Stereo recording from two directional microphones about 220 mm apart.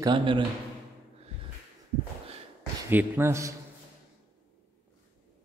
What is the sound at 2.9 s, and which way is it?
Speech, 10° right (ahead or behind).